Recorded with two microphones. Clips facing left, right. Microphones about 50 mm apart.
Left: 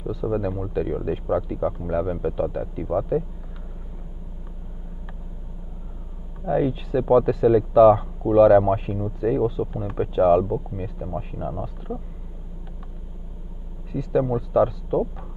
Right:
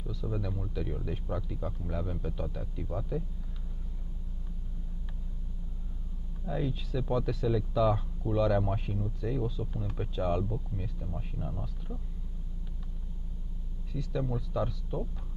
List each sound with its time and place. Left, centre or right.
0.0 s speech: left
6.4 s speech: left
13.9 s speech: left